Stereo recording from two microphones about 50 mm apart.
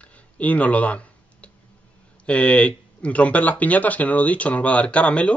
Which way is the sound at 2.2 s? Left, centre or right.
Left.